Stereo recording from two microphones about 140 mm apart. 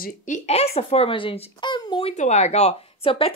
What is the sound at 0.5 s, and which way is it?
Speech, 45° left (ahead or behind).